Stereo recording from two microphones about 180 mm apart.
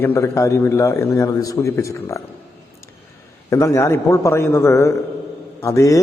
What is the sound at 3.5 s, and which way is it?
A man's voice, 15° left (ahead or behind).